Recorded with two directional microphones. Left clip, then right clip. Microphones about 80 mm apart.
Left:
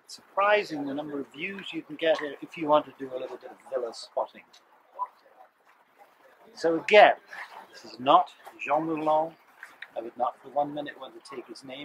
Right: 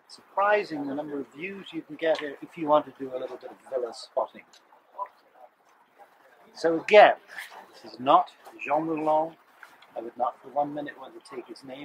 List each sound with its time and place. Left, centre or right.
0.1 s speech: left; by 4.4 s centre
6.5 s speech: centre